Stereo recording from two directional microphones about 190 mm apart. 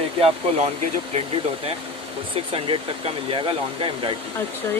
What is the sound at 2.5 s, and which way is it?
Speech, 30° right (ahead or behind).